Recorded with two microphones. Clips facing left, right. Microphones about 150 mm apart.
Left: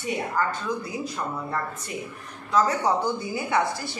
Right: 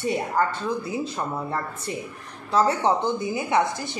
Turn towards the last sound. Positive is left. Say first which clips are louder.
# right 2 dB
turn(degrees=-20)  # may be behind; listen again after turning